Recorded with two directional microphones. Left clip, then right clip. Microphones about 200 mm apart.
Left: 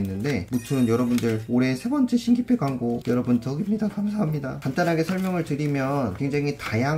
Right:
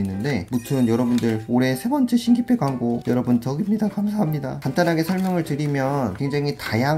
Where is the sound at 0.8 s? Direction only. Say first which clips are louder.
Right 1 dB; 20° right (ahead or behind).